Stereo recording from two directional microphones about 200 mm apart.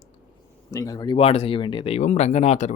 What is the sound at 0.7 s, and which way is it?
Speech, 15° left (ahead or behind).